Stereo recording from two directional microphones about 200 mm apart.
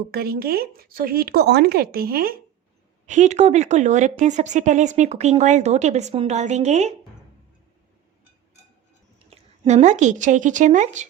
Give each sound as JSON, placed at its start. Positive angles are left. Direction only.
{"t": 0.1, "sound": "speech", "side_deg": -50}
{"t": 3.1, "sound": "speech", "side_deg": -35}
{"t": 9.1, "sound": "speech", "side_deg": -30}